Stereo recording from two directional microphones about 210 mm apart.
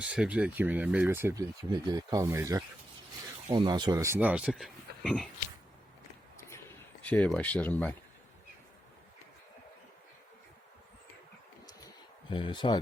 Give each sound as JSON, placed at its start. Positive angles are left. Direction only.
{"t": 0.0, "sound": "speech", "side_deg": -5}
{"t": 6.3, "sound": "a sound", "side_deg": 10}
{"t": 12.3, "sound": "speech", "side_deg": 25}